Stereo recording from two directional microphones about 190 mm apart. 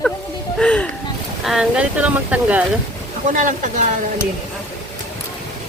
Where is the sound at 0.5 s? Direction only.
5° left (ahead or behind).